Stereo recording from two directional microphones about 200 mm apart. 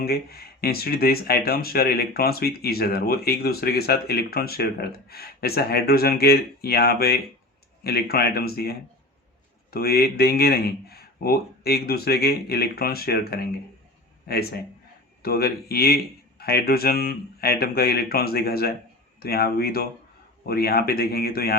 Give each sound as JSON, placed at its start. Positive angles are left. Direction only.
{"t": 0.0, "sound": "speech", "side_deg": 50}
{"t": 9.7, "sound": "speech", "side_deg": 50}